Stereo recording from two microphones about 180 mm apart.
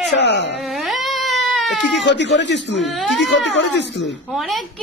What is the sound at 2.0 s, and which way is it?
Speech, 75° left (ahead or behind).